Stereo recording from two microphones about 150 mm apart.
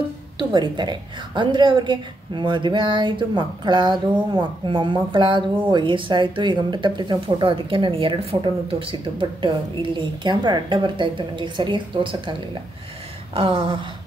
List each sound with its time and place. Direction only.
0.4 s speech: 30° right (ahead or behind)